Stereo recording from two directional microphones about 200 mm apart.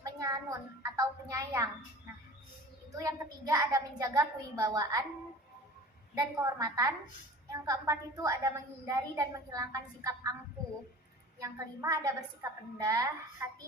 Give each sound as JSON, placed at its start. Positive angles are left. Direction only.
{"t": 0.0, "sound": "a sound", "side_deg": -20}
{"t": 0.8, "sound": "a woman's voice", "side_deg": -15}
{"t": 2.9, "sound": "a woman's voice", "side_deg": -15}
{"t": 6.1, "sound": "a woman's voice", "side_deg": -20}
{"t": 11.3, "sound": "a woman's voice", "side_deg": -15}